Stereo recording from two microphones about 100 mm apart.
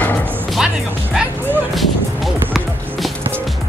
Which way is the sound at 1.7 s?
Centre (ahead or behind).